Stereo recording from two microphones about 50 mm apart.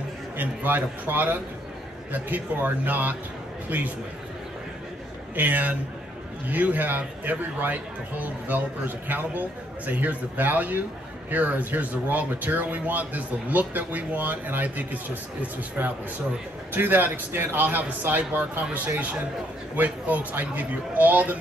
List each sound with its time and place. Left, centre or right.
0.4 s speech: right
5.3 s speech: right
19.7 s speech: right